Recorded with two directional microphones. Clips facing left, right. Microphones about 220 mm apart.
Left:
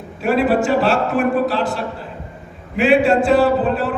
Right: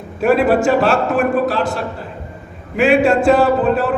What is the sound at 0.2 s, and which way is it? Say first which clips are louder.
A man's voice: right 3 dB; 45° right (ahead or behind).